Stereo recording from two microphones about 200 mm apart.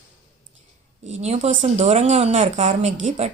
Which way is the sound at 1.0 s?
35° right (ahead or behind).